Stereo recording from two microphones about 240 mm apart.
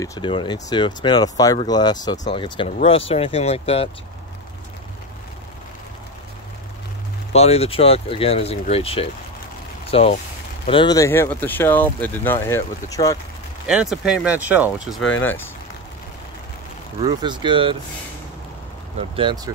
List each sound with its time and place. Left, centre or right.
0.0 s speech: centre
7.3 s speech: left
13.7 s speech: centre
15.1 s speech: centre
17.0 s speech: centre
18.9 s speech: right